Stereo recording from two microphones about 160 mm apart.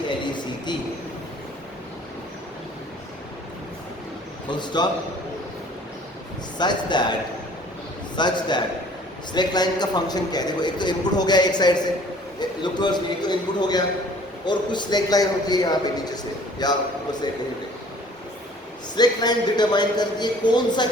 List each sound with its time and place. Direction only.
0.3 s a sound: 30° left (ahead or behind)
4.4 s a man's voice: 30° left (ahead or behind)
6.6 s a man's voice: 30° left (ahead or behind)
8.1 s a man's voice: 30° left (ahead or behind)
18.9 s a man's voice: 25° left (ahead or behind)